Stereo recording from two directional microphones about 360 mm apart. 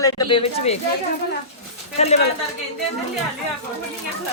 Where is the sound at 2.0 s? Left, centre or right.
Centre.